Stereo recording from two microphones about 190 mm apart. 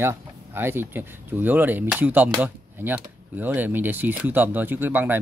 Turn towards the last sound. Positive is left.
turn(degrees=-10)  # may be behind; listen again after turning